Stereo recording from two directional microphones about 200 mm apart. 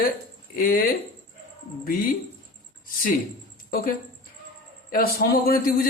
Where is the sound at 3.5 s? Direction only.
45° left (ahead or behind).